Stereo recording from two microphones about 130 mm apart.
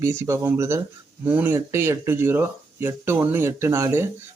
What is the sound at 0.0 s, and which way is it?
Speech, 20° right (ahead or behind).